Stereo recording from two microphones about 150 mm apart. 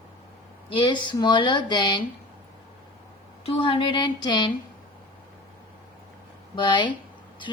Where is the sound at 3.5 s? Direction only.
40° left (ahead or behind).